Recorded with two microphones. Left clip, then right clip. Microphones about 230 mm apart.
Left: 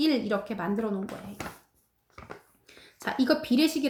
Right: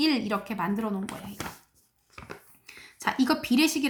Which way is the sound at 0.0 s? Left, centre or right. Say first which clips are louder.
Even; right.